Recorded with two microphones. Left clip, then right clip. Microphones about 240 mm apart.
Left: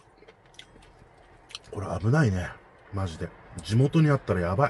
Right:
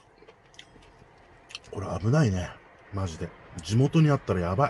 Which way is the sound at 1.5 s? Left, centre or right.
Centre.